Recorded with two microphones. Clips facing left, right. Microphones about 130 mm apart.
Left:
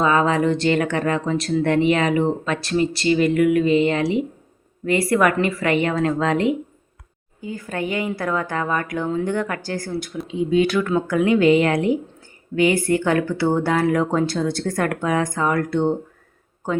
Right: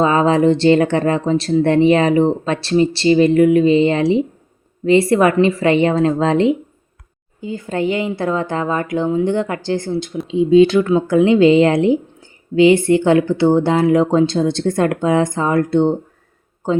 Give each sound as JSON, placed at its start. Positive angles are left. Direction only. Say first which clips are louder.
{"t": 0.0, "sound": "speech", "louder": "right 5 dB", "side_deg": -30}